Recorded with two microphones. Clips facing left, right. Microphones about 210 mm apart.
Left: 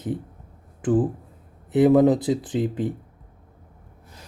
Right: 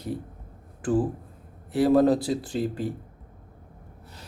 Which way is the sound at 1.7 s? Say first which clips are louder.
Left 3 dB; 20° left (ahead or behind).